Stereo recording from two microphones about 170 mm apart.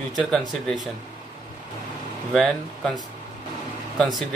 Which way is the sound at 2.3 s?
Centre (ahead or behind).